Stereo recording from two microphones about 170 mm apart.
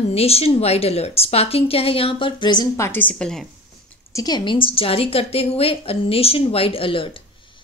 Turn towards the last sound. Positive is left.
turn(degrees=30)  # may be behind; listen again after turning